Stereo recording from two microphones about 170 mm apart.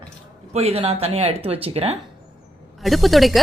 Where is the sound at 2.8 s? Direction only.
Centre (ahead or behind).